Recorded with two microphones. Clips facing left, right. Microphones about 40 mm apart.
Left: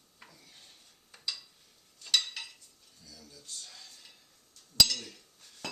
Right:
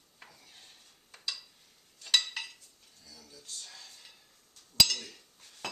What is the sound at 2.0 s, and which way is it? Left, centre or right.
Stir, centre.